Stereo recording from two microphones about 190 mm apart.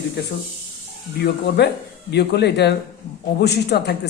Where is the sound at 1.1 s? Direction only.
60° left (ahead or behind).